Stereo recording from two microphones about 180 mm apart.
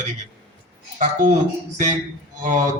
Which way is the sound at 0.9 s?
45° right (ahead or behind).